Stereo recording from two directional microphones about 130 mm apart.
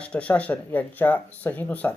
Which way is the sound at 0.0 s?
10° left (ahead or behind).